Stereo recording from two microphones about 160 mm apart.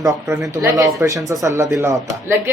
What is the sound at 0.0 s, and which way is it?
Speech, 20° right (ahead or behind).